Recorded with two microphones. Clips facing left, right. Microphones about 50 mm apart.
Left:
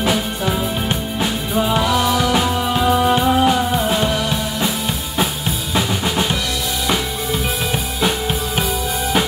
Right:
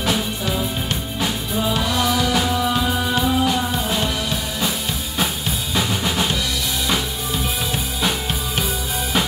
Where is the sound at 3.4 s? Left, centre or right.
Left.